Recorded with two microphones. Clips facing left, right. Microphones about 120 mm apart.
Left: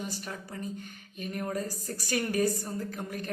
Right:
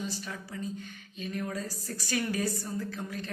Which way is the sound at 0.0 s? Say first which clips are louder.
Even; 50° left (ahead or behind).